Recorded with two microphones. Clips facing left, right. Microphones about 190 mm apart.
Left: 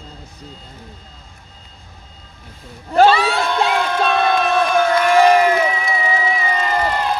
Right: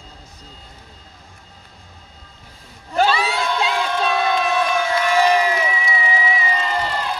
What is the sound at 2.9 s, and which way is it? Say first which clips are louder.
Crowd: left 6 dB; 60° left (ahead or behind).